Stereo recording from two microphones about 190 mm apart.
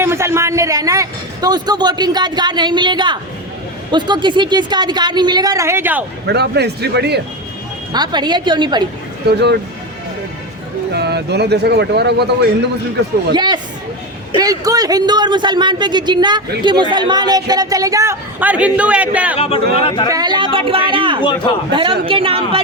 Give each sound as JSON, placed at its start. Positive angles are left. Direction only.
{"t": 0.0, "sound": "a man's voice", "side_deg": -15}
{"t": 6.2, "sound": "speech", "side_deg": -60}
{"t": 7.9, "sound": "speech", "side_deg": -20}
{"t": 10.9, "sound": "speech", "side_deg": -60}
{"t": 13.3, "sound": "speech", "side_deg": -25}
{"t": 19.4, "sound": "speech", "side_deg": 30}
{"t": 20.1, "sound": "speech", "side_deg": -20}